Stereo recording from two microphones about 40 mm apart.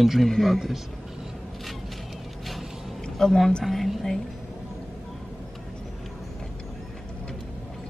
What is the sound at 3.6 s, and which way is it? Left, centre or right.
Speech, centre.